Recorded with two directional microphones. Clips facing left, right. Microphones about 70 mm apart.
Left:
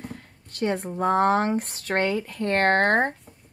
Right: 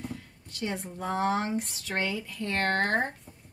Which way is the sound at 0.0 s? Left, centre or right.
Left.